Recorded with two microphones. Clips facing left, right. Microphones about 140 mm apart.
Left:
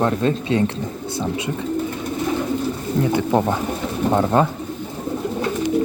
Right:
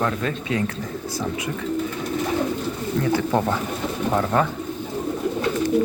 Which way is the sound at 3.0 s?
20° left (ahead or behind).